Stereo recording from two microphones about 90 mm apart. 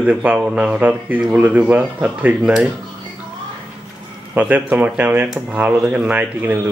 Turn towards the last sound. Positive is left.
turn(degrees=-15)  # may be behind; listen again after turning